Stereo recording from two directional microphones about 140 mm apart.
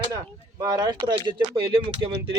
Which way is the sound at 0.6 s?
30° right (ahead or behind).